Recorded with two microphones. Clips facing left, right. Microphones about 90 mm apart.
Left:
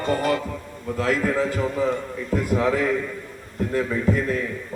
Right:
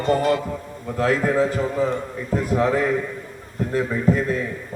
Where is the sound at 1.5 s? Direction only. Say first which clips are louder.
Right 1 dB; 10° right (ahead or behind).